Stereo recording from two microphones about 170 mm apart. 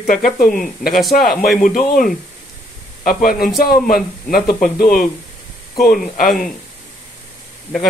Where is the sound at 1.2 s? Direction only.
Centre (ahead or behind).